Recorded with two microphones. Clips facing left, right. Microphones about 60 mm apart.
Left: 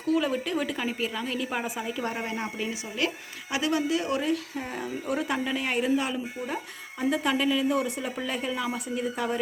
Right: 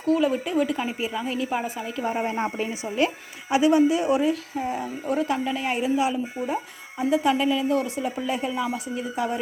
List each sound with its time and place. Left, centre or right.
0.0 s speech: centre
2.2 s speech: right; by 4.3 s centre
4.3 s speech: centre